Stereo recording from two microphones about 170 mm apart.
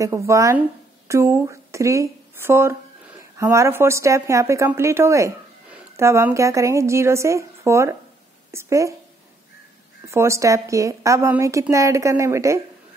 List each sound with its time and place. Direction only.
0.0 s a woman's voice: 20° right (ahead or behind)
10.0 s a woman's voice: 15° right (ahead or behind)